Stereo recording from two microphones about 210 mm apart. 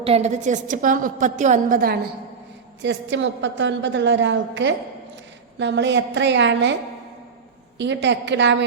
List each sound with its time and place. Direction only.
0.0 s a woman's voice: 30° right (ahead or behind)
2.8 s a woman's voice: 60° right (ahead or behind)
7.8 s a woman's voice: 55° right (ahead or behind)